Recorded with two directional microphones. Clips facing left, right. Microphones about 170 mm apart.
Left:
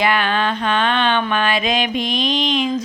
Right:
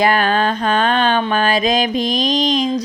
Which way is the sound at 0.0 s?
40° right (ahead or behind).